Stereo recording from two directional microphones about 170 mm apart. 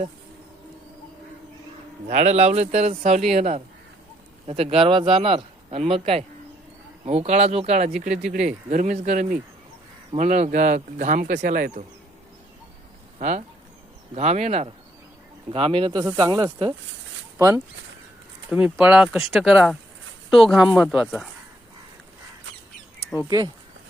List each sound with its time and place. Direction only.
2.0 s speech: 45° right (ahead or behind)
11.3 s speech: 65° right (ahead or behind)
13.1 s speech: 45° right (ahead or behind); by 17.6 s 20° right (ahead or behind)
18.5 s speech: 5° right (ahead or behind)